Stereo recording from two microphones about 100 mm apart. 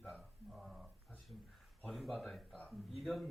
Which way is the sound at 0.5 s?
5° right (ahead or behind).